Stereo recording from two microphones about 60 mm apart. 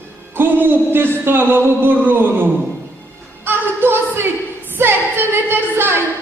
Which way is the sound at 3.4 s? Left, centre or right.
Right.